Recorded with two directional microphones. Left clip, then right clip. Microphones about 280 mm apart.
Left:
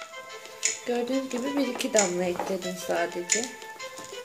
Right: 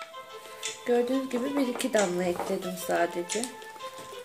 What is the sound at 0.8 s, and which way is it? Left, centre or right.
Speech, centre.